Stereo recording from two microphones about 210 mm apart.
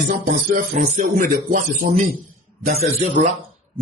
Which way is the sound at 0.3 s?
40° right (ahead or behind).